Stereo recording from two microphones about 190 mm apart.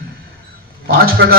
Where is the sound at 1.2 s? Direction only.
65° right (ahead or behind).